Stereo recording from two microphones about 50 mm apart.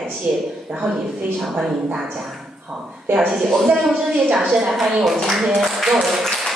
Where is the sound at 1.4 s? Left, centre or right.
Centre.